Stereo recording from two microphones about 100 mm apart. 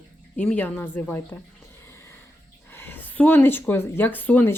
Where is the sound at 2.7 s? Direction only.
20° left (ahead or behind).